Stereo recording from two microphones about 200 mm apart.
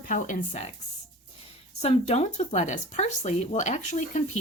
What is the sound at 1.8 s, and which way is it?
A woman's voice, 30° left (ahead or behind).